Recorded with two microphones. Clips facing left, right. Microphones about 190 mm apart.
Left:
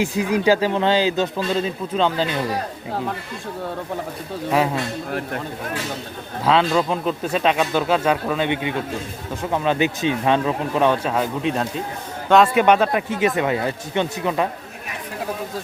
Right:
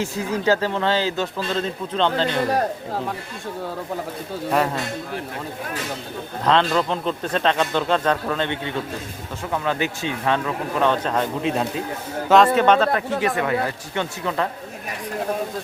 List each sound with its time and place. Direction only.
0.0 s a man's voice: 15° left (ahead or behind)
4.5 s speech: 5° left (ahead or behind)
6.4 s a man's voice: 5° left (ahead or behind)